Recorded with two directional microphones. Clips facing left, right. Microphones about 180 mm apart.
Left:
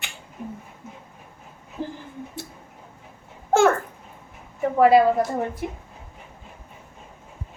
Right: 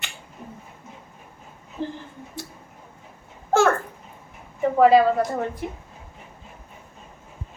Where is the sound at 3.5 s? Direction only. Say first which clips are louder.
Left 1 dB; 15° left (ahead or behind).